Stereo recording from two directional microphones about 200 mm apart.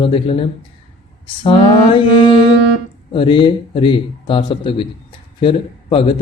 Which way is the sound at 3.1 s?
25° left (ahead or behind).